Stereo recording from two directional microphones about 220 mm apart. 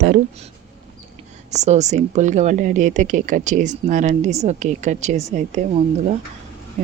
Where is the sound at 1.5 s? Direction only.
30° right (ahead or behind).